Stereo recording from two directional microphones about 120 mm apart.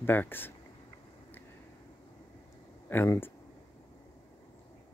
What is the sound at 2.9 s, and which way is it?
Speech, 20° left (ahead or behind).